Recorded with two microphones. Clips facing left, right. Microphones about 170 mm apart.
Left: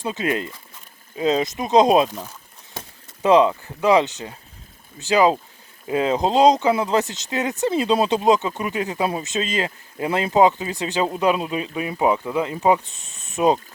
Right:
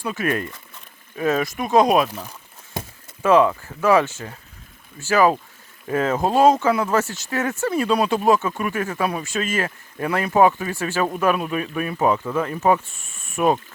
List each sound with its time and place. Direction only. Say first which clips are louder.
0.0 s speech: even; 20° left (ahead or behind)
3.2 s speech: left 1 dB; 20° left (ahead or behind)